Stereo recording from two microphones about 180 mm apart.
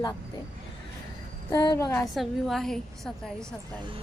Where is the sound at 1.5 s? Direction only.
20° left (ahead or behind).